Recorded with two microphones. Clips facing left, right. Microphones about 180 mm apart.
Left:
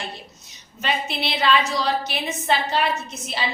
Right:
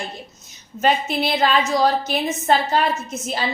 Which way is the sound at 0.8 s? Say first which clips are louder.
Right 6 dB; 45° right (ahead or behind).